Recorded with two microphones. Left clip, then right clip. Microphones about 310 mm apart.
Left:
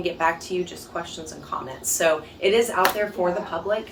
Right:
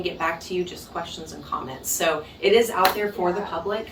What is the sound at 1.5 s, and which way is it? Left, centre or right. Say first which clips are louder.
A woman's voice: left 1 dB; centre.